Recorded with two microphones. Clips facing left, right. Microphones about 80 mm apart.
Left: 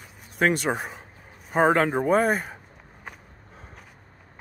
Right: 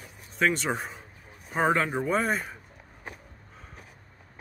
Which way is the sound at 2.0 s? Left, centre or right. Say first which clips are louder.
Left 5 dB; left.